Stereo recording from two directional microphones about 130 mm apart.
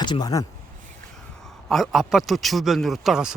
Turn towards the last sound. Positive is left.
turn(degrees=-5)  # may be behind; listen again after turning